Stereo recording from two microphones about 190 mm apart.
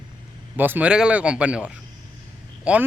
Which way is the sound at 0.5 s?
10° right (ahead or behind).